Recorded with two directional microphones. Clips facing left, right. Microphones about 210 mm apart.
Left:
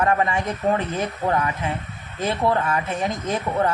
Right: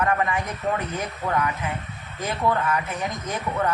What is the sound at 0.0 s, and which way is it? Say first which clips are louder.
Speech: left 3 dB; 25° left (ahead or behind).